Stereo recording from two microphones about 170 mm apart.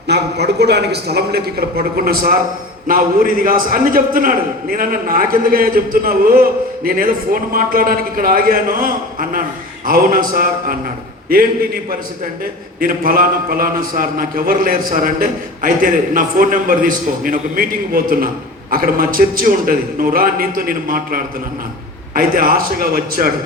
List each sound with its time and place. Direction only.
0.1 s a man's voice: 75° right (ahead or behind); by 23.3 s 60° right (ahead or behind)